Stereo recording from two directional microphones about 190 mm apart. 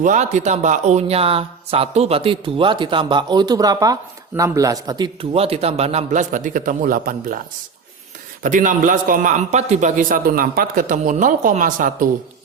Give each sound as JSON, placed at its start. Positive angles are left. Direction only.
{"t": 0.0, "sound": "a man's voice", "side_deg": -40}
{"t": 8.4, "sound": "a man's voice", "side_deg": -45}